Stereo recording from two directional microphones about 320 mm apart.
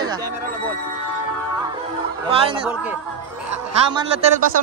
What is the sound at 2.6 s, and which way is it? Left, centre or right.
Speech, centre.